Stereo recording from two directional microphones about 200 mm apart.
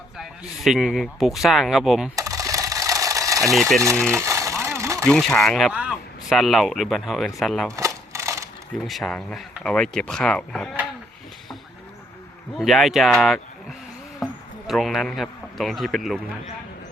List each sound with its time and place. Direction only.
0.2 s speech: centre (ahead or behind)
2.1 s sewing machine: 15° right (ahead or behind)
3.5 s speech: centre (ahead or behind)
4.1 s sewing machine: 15° right (ahead or behind)
5.0 s speech: 5° left (ahead or behind)
7.8 s a sound: 15° right (ahead or behind)
8.9 s speech: centre (ahead or behind)
12.5 s speech: centre (ahead or behind)